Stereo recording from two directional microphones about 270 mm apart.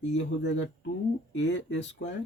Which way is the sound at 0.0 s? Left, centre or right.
Left.